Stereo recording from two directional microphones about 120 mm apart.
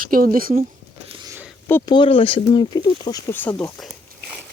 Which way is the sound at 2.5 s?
35° left (ahead or behind).